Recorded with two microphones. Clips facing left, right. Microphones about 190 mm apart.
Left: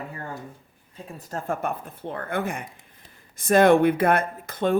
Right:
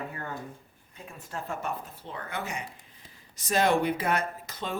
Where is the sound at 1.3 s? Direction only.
50° left (ahead or behind).